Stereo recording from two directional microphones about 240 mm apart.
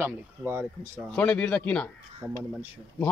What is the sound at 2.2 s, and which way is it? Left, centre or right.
Speech, centre.